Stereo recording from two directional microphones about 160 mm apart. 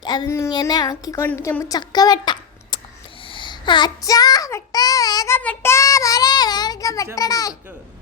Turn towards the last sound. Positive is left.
turn(degrees=20)  # may be behind; listen again after turning